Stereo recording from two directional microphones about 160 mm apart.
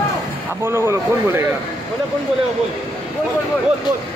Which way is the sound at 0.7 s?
15° right (ahead or behind).